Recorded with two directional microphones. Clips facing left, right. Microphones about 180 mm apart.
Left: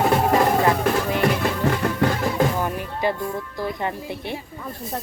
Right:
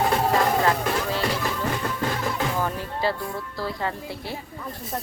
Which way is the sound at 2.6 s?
15° left (ahead or behind).